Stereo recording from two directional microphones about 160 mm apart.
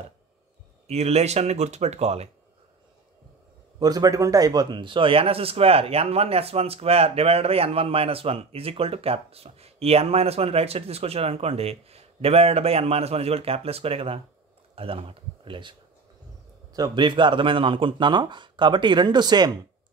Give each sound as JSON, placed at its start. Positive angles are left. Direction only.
{"t": 0.8, "sound": "speech", "side_deg": -40}
{"t": 3.8, "sound": "speech", "side_deg": -20}
{"t": 16.7, "sound": "speech", "side_deg": -25}